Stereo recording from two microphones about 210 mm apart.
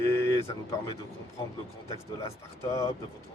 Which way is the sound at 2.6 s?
15° left (ahead or behind).